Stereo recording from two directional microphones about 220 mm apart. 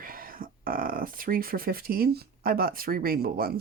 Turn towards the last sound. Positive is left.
turn(degrees=-40)  # may be behind; listen again after turning